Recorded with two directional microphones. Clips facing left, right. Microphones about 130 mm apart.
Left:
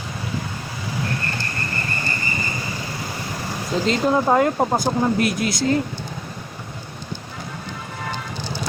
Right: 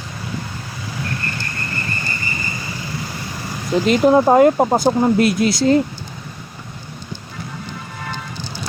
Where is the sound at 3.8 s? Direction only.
15° right (ahead or behind).